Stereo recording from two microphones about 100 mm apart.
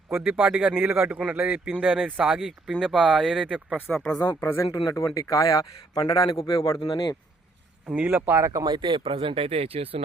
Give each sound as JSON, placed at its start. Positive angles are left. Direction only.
{"t": 0.3, "sound": "speech", "side_deg": -10}
{"t": 3.9, "sound": "speech", "side_deg": 10}
{"t": 4.2, "sound": "a man's voice", "side_deg": 20}
{"t": 6.7, "sound": "speech", "side_deg": 60}
{"t": 7.9, "sound": "speech", "side_deg": -15}
{"t": 8.6, "sound": "speech", "side_deg": -50}